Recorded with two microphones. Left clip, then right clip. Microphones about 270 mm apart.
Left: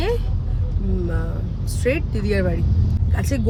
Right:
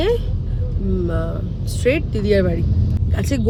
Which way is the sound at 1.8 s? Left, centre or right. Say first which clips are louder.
Right 4 dB; centre.